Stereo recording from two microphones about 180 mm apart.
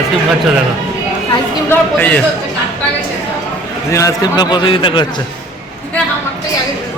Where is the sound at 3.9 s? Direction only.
20° left (ahead or behind).